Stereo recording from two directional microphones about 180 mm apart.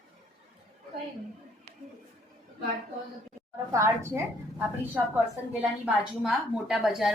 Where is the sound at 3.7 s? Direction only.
15° right (ahead or behind).